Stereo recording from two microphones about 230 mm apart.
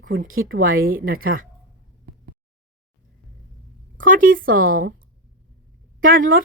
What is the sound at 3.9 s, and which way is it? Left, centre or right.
A woman's voice, right.